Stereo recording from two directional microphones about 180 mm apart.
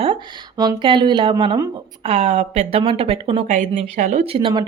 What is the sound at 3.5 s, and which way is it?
Speech, 40° right (ahead or behind).